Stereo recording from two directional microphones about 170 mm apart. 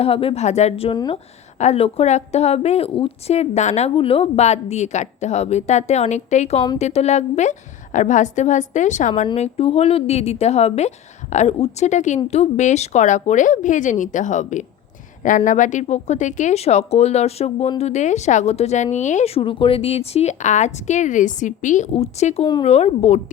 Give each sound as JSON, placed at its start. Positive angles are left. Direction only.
{"t": 0.0, "sound": "speech", "side_deg": 35}